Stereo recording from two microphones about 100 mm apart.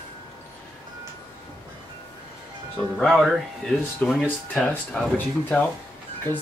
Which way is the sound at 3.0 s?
Centre (ahead or behind).